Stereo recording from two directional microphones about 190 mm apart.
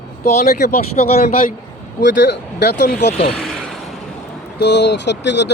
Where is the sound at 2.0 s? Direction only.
65° left (ahead or behind).